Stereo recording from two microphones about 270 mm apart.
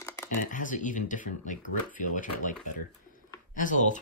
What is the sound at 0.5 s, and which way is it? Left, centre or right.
Speech, left.